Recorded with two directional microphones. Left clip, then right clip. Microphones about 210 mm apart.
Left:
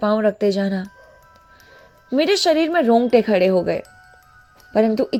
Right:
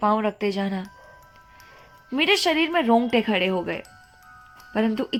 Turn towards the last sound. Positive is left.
turn(degrees=15)  # may be behind; listen again after turning